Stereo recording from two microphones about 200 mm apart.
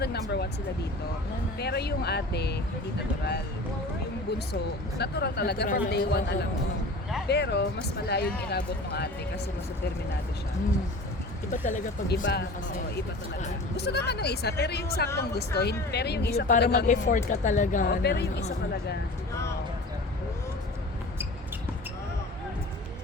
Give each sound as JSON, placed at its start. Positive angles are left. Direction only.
{"t": 0.0, "sound": "a sound", "side_deg": 55}
{"t": 1.5, "sound": "speech", "side_deg": 55}
{"t": 4.9, "sound": "speech", "side_deg": 50}
{"t": 11.5, "sound": "speech", "side_deg": 40}
{"t": 12.0, "sound": "speech", "side_deg": 60}
{"t": 13.7, "sound": "speech", "side_deg": 55}
{"t": 16.8, "sound": "speech", "side_deg": 40}
{"t": 19.3, "sound": "a sound", "side_deg": 15}